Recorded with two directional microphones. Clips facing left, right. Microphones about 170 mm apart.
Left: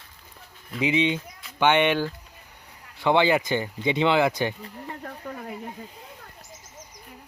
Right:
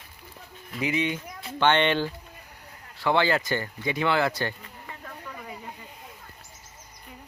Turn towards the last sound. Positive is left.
turn(degrees=50)  # may be behind; listen again after turning